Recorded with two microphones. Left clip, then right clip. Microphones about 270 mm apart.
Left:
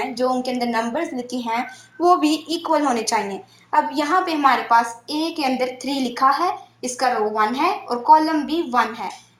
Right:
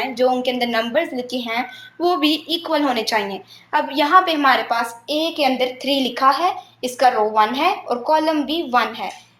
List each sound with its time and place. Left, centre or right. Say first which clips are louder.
0.1 s speech: right 3 dB; centre